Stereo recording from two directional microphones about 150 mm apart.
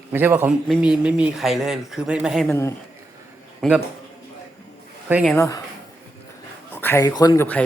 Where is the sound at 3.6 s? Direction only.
Centre (ahead or behind).